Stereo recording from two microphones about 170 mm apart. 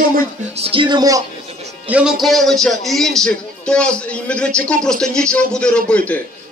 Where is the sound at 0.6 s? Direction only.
30° right (ahead or behind).